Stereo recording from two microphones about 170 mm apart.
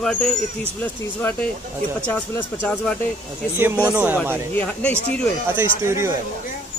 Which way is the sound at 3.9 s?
10° right (ahead or behind).